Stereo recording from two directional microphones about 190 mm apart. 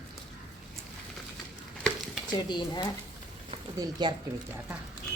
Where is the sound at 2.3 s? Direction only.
20° left (ahead or behind).